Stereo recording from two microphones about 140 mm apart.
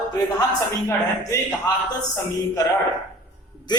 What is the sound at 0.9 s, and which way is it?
Speech, 20° left (ahead or behind).